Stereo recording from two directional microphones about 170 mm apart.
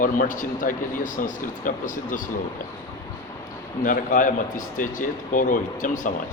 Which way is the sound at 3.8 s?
50° left (ahead or behind).